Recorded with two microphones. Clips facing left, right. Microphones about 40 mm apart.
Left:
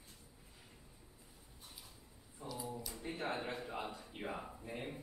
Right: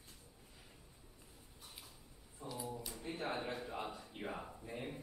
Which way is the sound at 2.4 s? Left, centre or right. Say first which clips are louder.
Even; centre.